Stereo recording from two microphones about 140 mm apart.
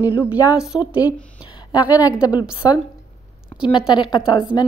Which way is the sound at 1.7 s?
30° left (ahead or behind).